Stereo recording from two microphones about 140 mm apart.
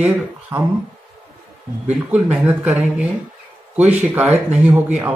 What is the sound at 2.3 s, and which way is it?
Speech, 5° right (ahead or behind).